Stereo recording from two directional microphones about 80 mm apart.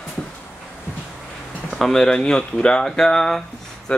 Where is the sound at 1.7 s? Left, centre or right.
Centre.